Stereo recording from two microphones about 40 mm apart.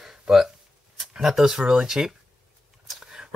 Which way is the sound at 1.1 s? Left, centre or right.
Centre.